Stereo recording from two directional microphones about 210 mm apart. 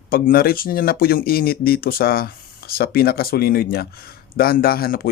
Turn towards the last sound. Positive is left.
turn(degrees=45)  # may be behind; listen again after turning